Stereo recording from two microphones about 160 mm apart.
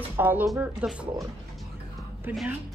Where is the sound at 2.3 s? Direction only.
10° right (ahead or behind).